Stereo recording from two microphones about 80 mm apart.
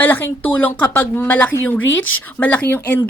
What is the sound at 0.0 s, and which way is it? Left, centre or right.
A woman's voice, left.